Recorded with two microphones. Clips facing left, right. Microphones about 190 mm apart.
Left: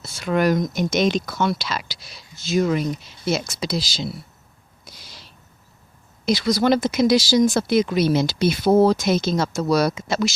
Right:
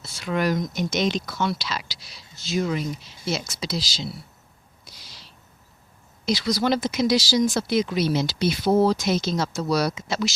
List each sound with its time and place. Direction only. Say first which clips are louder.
0.0 s speech: left 5 dB; 50° left (ahead or behind)
4.9 s owl: left 4 dB; 50° left (ahead or behind)
6.2 s speech: left 4 dB; 50° left (ahead or behind)